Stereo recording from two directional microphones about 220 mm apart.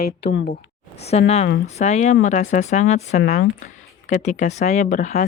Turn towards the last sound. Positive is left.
turn(degrees=35)  # may be behind; listen again after turning